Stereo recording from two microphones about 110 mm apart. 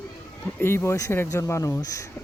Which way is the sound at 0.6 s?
20° left (ahead or behind).